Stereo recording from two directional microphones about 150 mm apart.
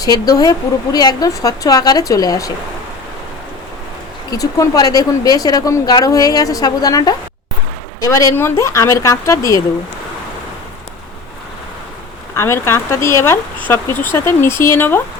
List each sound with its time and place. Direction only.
0.0 s speech: 25° left (ahead or behind)
4.3 s speech: 25° left (ahead or behind)
12.4 s speech: 15° left (ahead or behind)